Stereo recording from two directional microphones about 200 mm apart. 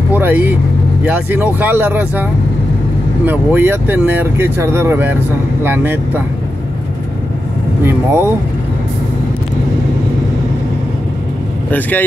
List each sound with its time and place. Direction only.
0.1 s speech: 10° right (ahead or behind)
3.3 s speech: 10° right (ahead or behind)
7.8 s speech: 10° right (ahead or behind)